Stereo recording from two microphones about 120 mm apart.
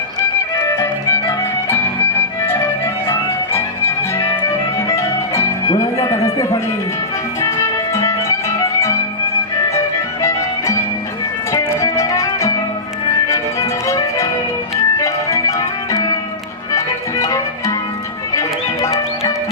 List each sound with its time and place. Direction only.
0.2 s music: 25° left (ahead or behind)
2.5 s music: 20° left (ahead or behind)
5.8 s speech: 25° left (ahead or behind)
7.4 s music: 25° left (ahead or behind)
11.5 s music: 25° left (ahead or behind)